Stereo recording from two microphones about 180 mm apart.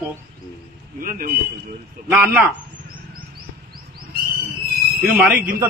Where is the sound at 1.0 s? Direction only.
50° right (ahead or behind).